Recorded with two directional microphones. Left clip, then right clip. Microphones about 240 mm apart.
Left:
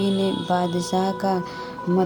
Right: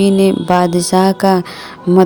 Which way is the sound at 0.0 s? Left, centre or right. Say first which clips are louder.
Right 11 dB; right.